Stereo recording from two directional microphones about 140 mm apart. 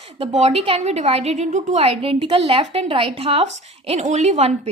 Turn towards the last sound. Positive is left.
turn(degrees=-50)  # may be behind; listen again after turning